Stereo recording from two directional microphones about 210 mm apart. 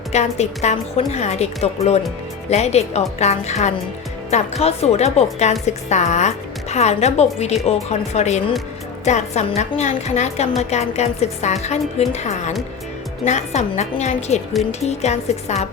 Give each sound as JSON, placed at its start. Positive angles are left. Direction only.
{"t": 0.1, "sound": "speech", "side_deg": 30}